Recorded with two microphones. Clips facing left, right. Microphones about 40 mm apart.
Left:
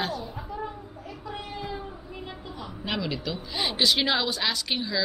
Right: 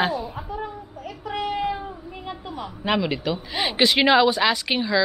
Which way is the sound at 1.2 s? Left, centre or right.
Right.